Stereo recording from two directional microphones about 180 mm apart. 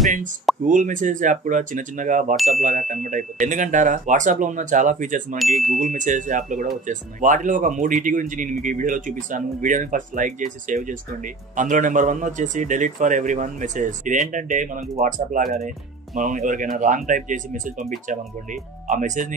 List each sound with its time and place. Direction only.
0.7 s speech: 45° right (ahead or behind)
5.4 s chime: centre (ahead or behind)
5.8 s speech: 45° right (ahead or behind)